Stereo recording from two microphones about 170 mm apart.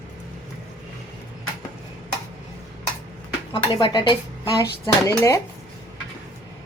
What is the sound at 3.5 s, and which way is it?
Speech, 30° left (ahead or behind).